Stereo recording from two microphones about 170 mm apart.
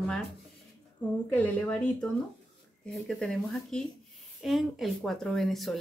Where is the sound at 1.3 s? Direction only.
10° left (ahead or behind).